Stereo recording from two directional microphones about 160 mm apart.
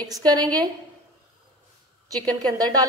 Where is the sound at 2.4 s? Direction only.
25° right (ahead or behind).